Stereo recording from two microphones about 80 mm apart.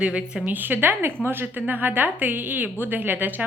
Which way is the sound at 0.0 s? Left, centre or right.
Centre.